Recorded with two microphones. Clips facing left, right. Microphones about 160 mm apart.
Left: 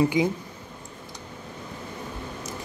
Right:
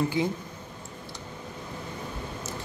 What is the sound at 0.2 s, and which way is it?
Speech, 15° left (ahead or behind).